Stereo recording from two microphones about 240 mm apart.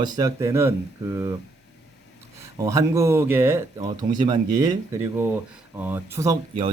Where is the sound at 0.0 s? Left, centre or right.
Centre.